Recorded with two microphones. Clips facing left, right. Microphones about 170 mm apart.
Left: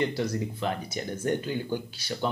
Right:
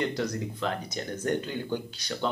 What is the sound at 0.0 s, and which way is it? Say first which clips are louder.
Speech: left 2 dB; 5° left (ahead or behind).